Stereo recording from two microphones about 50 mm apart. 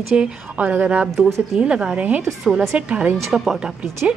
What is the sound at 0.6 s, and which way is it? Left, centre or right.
Speech, right.